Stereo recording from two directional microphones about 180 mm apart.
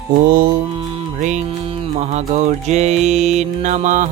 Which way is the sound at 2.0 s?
40° right (ahead or behind).